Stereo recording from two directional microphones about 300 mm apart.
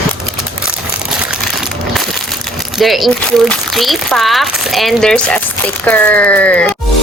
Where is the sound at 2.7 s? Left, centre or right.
Centre.